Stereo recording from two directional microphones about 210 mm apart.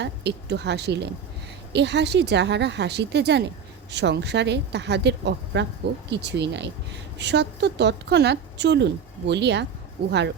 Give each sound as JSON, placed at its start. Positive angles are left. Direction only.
{"t": 0.0, "sound": "a woman's voice", "side_deg": -55}